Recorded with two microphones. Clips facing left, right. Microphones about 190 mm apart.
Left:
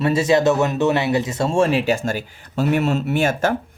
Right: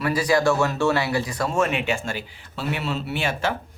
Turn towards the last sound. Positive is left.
turn(degrees=45)  # may be behind; listen again after turning